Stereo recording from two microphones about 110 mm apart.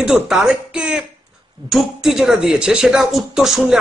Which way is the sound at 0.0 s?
5° right (ahead or behind).